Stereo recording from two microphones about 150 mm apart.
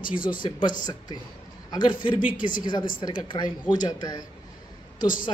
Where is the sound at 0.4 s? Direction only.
30° left (ahead or behind).